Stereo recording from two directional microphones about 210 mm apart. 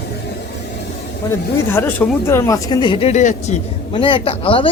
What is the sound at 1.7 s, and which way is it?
Speech, 10° left (ahead or behind).